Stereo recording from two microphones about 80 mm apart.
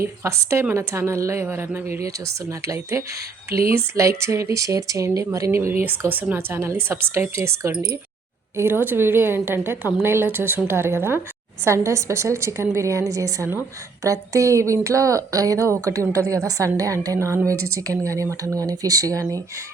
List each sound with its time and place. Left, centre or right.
0.0 s speech: right
2.0 s speech: right
5.5 s a woman's voice: right